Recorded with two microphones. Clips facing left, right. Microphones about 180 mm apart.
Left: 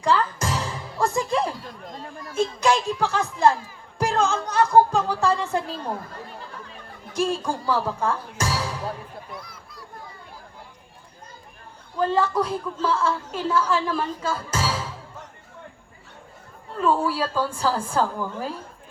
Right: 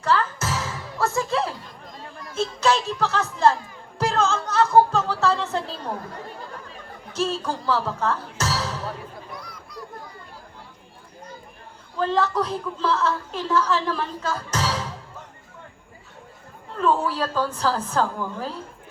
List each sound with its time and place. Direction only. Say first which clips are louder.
0.0 s music: left 1 dB; 15° left (ahead or behind)
2.3 s a woman's voice: left 1 dB; 15° left (ahead or behind)
7.1 s speech: left 1 dB; 15° left (ahead or behind)
9.3 s a sound: right 2 dB; 5° left (ahead or behind)
11.9 s a woman's voice: left 1 dB; 10° left (ahead or behind)
16.8 s a woman's voice: even; 10° left (ahead or behind)